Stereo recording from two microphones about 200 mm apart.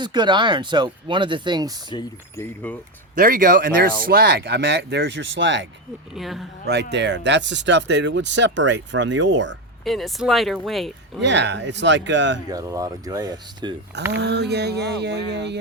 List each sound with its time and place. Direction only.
0.0 s speech: 20° right (ahead or behind)
1.9 s speech: 15° left (ahead or behind)
3.2 s speech: 40° right (ahead or behind); by 5.6 s 65° right (ahead or behind)
6.1 s speech: centre (ahead or behind)
6.9 s speech: 60° right (ahead or behind)
9.8 s speech: centre (ahead or behind)
11.2 s speech: 60° right (ahead or behind)
12.5 s speech: 15° right (ahead or behind)
14.1 s speech: 60° right (ahead or behind)